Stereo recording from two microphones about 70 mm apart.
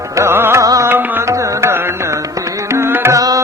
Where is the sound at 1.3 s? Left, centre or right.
Right.